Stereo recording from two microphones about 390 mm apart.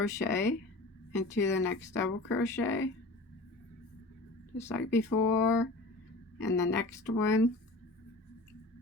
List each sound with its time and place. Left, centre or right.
0.0 s speech: centre
4.5 s speech: centre
5.1 s speech: left
6.6 s speech: centre